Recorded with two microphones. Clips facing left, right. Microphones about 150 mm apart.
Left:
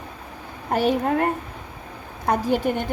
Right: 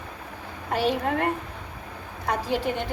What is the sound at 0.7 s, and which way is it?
A woman's voice, 45° left (ahead or behind).